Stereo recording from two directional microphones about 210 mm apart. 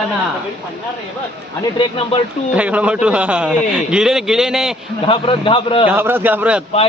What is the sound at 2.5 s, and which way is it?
A man's voice, 5° right (ahead or behind).